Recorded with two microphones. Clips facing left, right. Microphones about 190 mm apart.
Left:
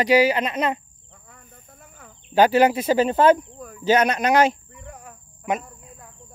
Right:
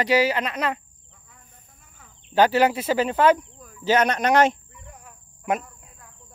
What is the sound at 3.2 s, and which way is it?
Speech, 50° left (ahead or behind).